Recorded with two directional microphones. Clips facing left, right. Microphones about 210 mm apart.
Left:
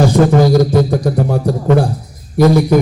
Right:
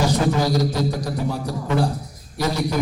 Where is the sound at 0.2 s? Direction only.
55° left (ahead or behind).